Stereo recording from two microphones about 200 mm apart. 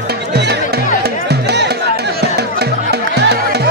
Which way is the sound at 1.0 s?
55° right (ahead or behind).